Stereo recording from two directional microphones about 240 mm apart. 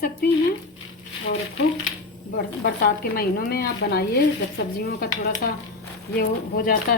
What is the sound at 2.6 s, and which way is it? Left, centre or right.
A woman's voice, left.